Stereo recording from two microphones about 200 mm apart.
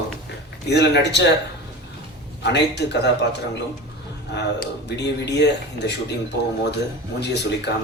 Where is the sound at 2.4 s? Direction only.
60° left (ahead or behind).